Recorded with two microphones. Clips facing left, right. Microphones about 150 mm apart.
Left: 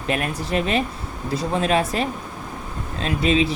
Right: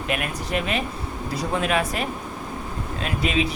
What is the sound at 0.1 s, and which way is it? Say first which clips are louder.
Speech: left 4 dB; 35° left (ahead or behind).